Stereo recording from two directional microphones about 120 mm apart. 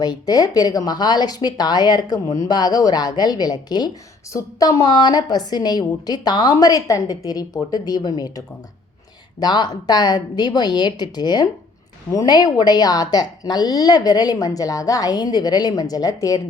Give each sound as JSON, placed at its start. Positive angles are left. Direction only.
{"t": 0.0, "sound": "a woman's voice", "side_deg": 35}